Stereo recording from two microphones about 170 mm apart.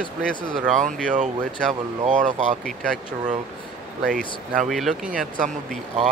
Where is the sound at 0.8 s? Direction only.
50° right (ahead or behind).